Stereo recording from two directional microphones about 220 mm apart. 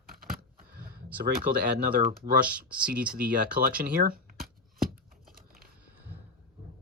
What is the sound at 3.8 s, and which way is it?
Speech, 40° right (ahead or behind).